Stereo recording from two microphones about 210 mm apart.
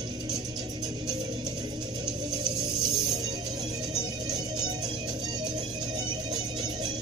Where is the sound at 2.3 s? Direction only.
20° right (ahead or behind).